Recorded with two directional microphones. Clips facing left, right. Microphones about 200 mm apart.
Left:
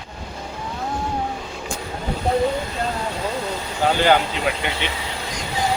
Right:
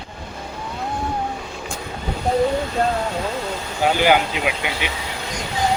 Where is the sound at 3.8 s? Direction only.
10° right (ahead or behind).